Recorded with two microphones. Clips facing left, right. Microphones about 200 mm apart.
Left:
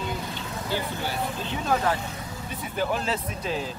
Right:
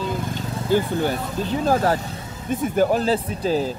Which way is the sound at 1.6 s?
40° right (ahead or behind).